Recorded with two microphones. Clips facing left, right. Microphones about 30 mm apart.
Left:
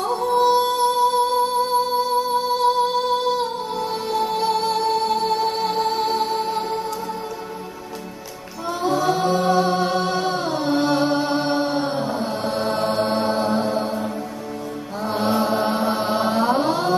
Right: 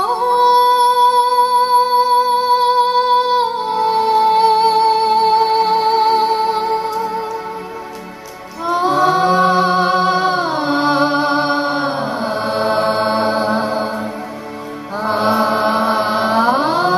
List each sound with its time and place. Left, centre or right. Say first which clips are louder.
0.0 s music: right 5 dB; right
8.6 s music: right 7 dB; right
15.0 s chant: right 6 dB; right